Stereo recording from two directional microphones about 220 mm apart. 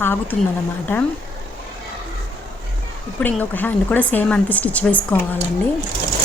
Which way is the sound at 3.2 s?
10° left (ahead or behind).